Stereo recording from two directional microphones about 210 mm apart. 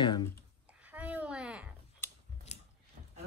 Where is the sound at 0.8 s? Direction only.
5° right (ahead or behind).